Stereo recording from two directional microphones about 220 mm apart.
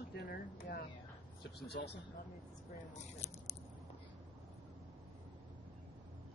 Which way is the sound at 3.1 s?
30° left (ahead or behind).